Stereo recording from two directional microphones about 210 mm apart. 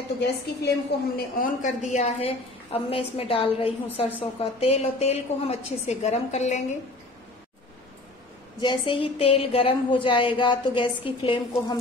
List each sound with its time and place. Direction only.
0.2 s a woman's voice: 50° left (ahead or behind); by 6.6 s 30° left (ahead or behind)
8.5 s a woman's voice: 25° left (ahead or behind)